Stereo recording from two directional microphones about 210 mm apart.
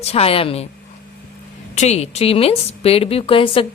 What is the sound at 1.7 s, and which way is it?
A woman's voice, 30° left (ahead or behind).